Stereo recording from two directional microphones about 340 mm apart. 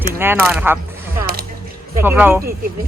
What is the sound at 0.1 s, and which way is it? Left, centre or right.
Speech, centre.